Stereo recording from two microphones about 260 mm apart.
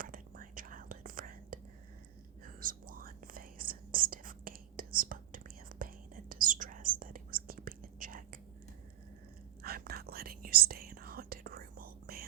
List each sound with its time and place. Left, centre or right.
0.0 s whispering: right
9.6 s whispering: right